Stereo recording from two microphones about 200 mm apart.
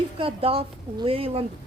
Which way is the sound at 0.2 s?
25° right (ahead or behind).